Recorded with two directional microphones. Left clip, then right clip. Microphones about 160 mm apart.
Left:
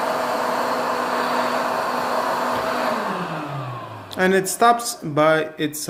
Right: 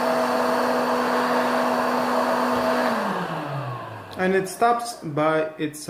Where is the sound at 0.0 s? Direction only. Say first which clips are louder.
Even; 15° left (ahead or behind).